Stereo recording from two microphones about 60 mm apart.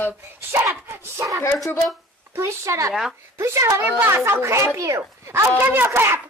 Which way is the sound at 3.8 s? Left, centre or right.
Right.